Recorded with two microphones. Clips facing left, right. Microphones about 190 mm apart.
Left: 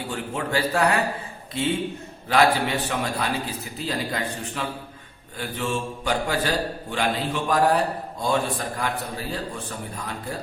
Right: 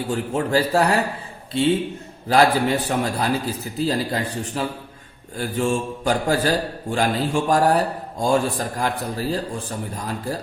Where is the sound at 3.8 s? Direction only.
35° right (ahead or behind).